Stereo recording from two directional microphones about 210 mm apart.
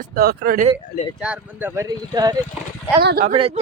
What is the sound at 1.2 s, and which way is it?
Speech, 5° right (ahead or behind).